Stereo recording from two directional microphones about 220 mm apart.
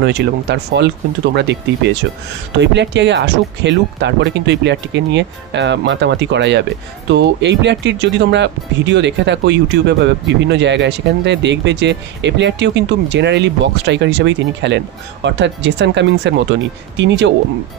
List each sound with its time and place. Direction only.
0.0 s speech: 50° right (ahead or behind)